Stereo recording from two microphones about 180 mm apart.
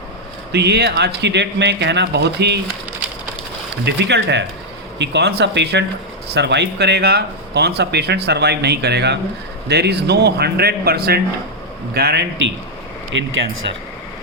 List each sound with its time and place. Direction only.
0.5 s speech: 65° right (ahead or behind)
3.8 s speech: 70° right (ahead or behind)
13.1 s speech: 90° right